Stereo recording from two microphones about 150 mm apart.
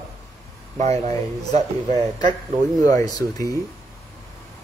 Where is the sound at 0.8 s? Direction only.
50° right (ahead or behind).